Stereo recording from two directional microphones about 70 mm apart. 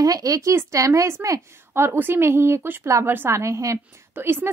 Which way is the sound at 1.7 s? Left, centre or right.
Right.